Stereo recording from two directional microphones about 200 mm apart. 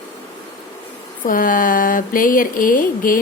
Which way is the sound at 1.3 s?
45° left (ahead or behind).